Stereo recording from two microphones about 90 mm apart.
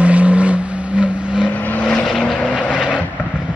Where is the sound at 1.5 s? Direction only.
20° left (ahead or behind).